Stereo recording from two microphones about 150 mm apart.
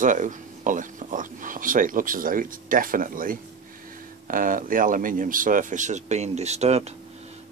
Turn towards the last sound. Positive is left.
turn(degrees=-45)  # may be behind; listen again after turning